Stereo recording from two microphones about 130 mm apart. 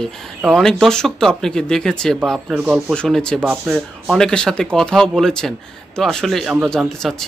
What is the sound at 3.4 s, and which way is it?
Speech, 10° right (ahead or behind).